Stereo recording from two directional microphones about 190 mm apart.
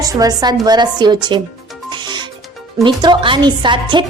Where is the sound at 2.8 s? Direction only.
25° right (ahead or behind).